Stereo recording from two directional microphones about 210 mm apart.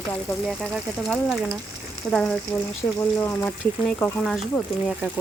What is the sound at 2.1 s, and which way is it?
Speech, 5° left (ahead or behind).